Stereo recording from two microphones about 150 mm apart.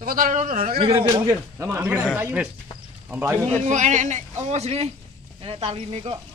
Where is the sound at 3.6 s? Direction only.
55° right (ahead or behind).